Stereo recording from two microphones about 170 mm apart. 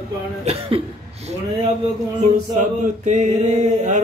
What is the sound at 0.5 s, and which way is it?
Cough, 35° right (ahead or behind).